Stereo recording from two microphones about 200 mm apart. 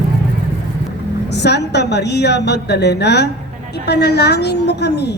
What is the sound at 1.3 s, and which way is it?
A woman's voice, 55° left (ahead or behind).